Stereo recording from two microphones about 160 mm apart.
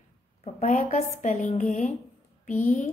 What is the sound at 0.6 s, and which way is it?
A woman's voice, 55° left (ahead or behind).